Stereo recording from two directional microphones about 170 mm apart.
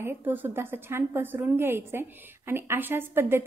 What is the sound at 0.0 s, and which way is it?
A woman's voice, 10° right (ahead or behind).